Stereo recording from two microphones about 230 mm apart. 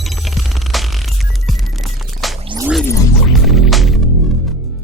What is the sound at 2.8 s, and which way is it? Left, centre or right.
Music, centre.